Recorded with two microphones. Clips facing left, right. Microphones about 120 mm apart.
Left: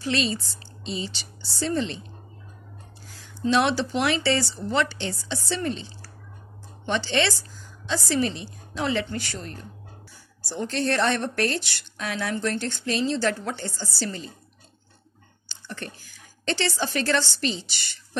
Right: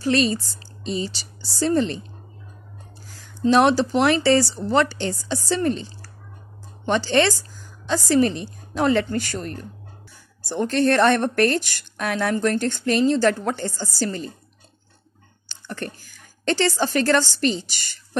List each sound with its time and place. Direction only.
0.0 s speech: 45° right (ahead or behind)
3.2 s a woman's voice: 45° right (ahead or behind)
15.4 s a woman's voice: 50° right (ahead or behind)